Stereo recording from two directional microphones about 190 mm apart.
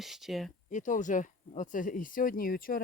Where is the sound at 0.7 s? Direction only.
40° left (ahead or behind).